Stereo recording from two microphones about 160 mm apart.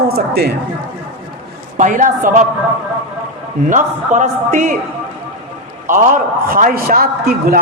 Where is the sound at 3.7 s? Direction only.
50° right (ahead or behind).